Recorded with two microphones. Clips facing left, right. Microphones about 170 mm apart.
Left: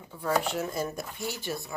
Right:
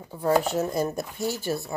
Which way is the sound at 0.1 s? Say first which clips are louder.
Right 6 dB; 35° right (ahead or behind).